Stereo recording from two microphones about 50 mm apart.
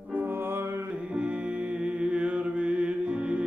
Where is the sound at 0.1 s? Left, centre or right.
Right.